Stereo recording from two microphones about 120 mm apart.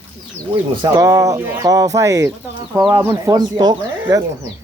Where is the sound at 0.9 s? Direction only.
25° right (ahead or behind).